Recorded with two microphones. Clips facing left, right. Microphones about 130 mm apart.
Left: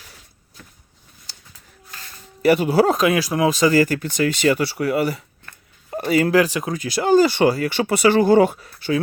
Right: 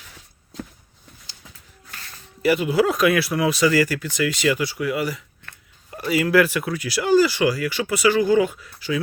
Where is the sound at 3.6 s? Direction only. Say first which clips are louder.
Left 2 dB; 40° left (ahead or behind).